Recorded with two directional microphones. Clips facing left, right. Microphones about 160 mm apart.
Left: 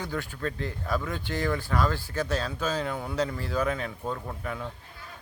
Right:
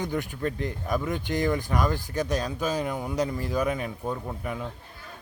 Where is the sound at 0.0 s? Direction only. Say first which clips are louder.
Right 3 dB; 15° right (ahead or behind).